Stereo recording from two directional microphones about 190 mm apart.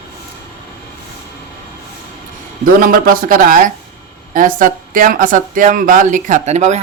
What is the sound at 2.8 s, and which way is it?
Speech, 50° right (ahead or behind).